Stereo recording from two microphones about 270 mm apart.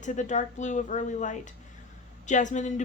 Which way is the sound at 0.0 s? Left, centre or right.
Left.